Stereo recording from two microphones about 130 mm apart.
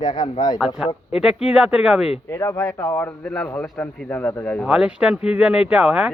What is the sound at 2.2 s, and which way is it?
A man's voice, 20° left (ahead or behind).